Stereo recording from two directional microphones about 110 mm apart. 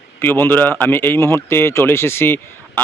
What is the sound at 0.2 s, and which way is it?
Speech, 20° left (ahead or behind).